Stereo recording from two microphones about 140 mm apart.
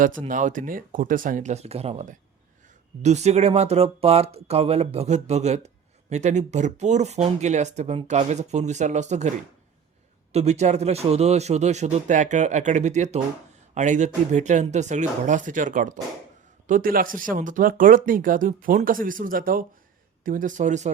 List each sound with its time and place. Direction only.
0.3 s speech: 70° right (ahead or behind)
10.3 s speech: 50° right (ahead or behind)
16.6 s speech: 80° right
20.2 s speech: 70° right (ahead or behind)